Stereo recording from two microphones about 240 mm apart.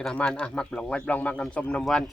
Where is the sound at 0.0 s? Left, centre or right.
Centre.